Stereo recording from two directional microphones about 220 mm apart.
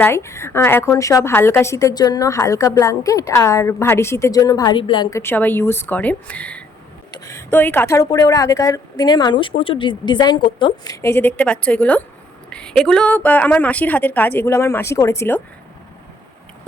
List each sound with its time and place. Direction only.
0.0 s a woman's voice: 10° left (ahead or behind)
5.2 s a woman's voice: 10° left (ahead or behind)